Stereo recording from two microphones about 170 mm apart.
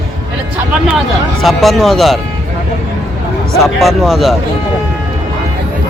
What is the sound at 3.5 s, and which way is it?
Speech, centre (ahead or behind).